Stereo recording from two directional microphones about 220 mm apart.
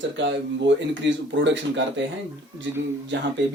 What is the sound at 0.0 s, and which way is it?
Speech, 55° right (ahead or behind).